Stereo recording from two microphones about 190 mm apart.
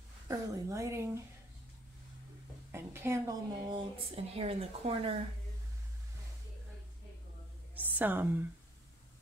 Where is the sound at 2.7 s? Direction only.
15° right (ahead or behind); by 5.1 s 30° right (ahead or behind).